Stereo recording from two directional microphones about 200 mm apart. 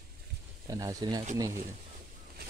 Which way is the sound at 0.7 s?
15° right (ahead or behind).